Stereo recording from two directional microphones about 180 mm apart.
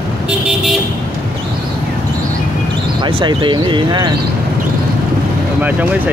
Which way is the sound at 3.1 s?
25° right (ahead or behind).